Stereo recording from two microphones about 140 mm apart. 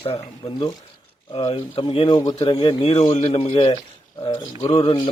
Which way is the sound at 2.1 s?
30° left (ahead or behind).